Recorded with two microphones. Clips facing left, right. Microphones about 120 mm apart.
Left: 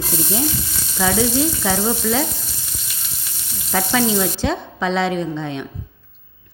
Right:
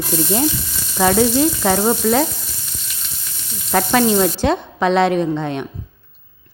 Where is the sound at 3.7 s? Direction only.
55° right (ahead or behind).